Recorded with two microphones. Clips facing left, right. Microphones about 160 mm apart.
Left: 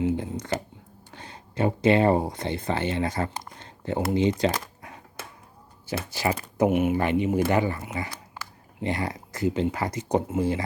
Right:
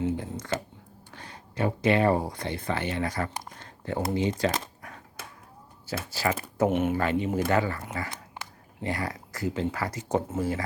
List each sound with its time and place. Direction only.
0.0 s shuffling cards: 20° left (ahead or behind)
1.1 s speech: 25° left (ahead or behind)
3.6 s a sound: 20° left (ahead or behind)
5.8 s speech: 20° left (ahead or behind)